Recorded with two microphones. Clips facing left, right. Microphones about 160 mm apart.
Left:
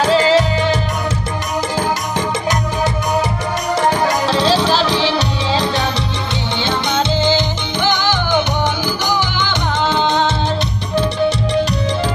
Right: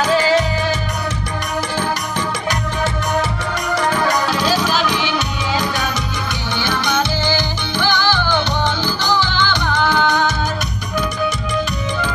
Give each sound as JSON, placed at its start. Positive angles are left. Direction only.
{"t": 0.0, "sound": "music", "side_deg": 30}
{"t": 4.3, "sound": "music", "side_deg": 30}
{"t": 9.4, "sound": "music", "side_deg": 20}